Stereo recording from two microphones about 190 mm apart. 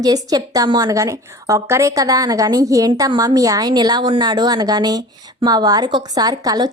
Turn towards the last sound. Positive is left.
turn(degrees=-20)  # may be behind; listen again after turning